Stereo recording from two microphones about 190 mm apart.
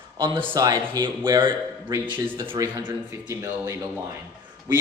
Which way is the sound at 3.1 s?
15° right (ahead or behind).